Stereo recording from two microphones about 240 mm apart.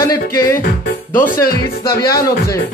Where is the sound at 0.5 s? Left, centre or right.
Left.